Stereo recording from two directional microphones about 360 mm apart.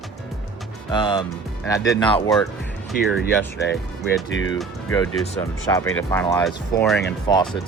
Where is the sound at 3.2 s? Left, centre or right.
Left.